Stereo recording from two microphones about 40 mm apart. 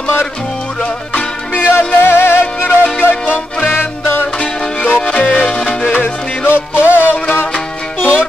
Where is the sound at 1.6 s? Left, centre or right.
Left.